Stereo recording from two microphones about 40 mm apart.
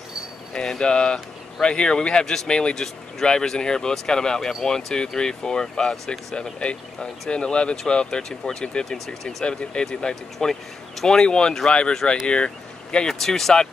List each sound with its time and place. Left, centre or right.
0.5 s speech: left
2.7 s speech: centre
9.4 s speech: left